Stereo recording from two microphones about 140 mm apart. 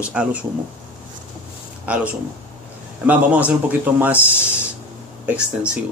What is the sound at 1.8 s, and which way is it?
Speech, 10° right (ahead or behind).